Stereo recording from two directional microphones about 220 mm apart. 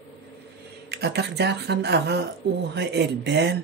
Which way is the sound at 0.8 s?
50° right (ahead or behind).